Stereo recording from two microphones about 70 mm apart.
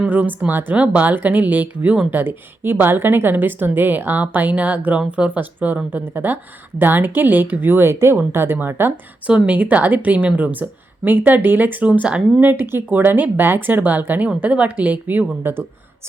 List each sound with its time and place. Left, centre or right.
0.0 s a woman's voice: right
9.2 s a woman's voice: right